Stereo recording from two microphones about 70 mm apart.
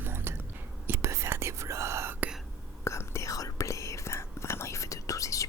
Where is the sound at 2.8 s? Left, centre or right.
Left.